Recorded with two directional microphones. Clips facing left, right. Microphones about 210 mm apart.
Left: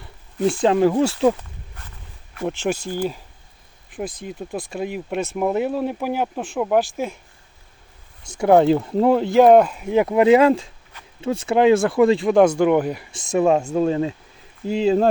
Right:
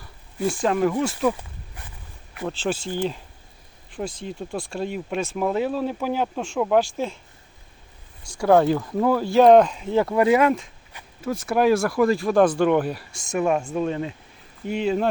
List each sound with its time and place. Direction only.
0.6 s speech: 30° left (ahead or behind)
1.4 s walk: 15° right (ahead or behind)
2.5 s speech: 15° left (ahead or behind)
8.2 s speech: 20° left (ahead or behind)